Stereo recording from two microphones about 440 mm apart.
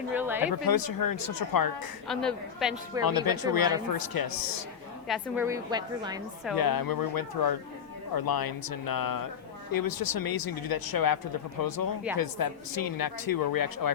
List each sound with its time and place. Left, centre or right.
0.1 s a woman's voice: centre
0.5 s speech: left
2.0 s a woman's voice: centre
3.1 s speech: left
5.0 s a woman's voice: centre
6.6 s speech: left